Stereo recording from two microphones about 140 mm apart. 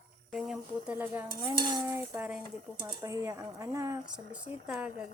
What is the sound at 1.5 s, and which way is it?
Stir, 30° right (ahead or behind).